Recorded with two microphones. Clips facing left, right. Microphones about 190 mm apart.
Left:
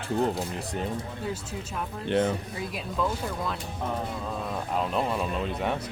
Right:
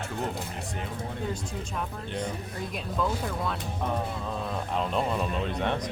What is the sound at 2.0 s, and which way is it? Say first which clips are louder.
Speech: left 11 dB; 70° left (ahead or behind).